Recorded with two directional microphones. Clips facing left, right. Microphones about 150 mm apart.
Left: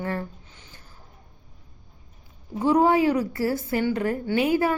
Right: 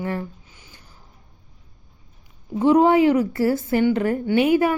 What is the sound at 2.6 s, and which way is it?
A woman's voice, 20° right (ahead or behind).